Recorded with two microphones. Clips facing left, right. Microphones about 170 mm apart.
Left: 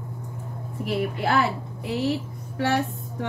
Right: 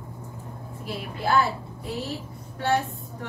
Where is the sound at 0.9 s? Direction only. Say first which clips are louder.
Left 3 dB; 75° left (ahead or behind).